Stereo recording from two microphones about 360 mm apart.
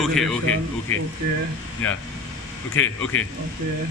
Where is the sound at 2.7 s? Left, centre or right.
Left.